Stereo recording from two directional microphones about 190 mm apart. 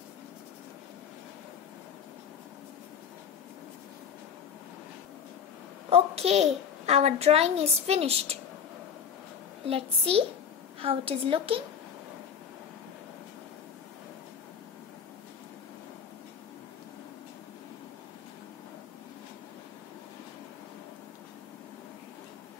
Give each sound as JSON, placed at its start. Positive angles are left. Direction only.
{"t": 5.9, "sound": "a child's voice", "side_deg": -30}
{"t": 9.7, "sound": "a child's voice", "side_deg": -30}